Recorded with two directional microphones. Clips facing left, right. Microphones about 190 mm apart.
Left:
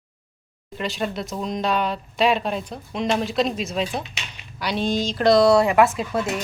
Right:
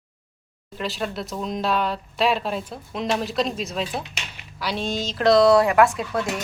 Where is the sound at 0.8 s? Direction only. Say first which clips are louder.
Left 2 dB; centre (ahead or behind).